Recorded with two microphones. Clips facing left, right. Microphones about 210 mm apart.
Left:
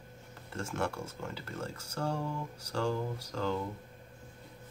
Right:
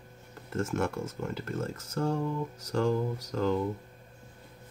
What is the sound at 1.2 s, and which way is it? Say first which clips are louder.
Speech: right 6 dB; 45° right (ahead or behind).